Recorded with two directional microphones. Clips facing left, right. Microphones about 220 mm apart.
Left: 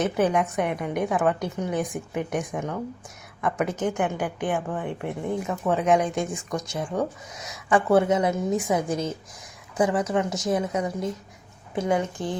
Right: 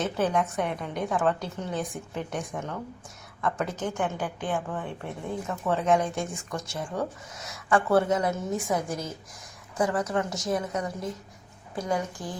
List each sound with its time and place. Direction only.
0.0 s a woman's voice: 15° left (ahead or behind)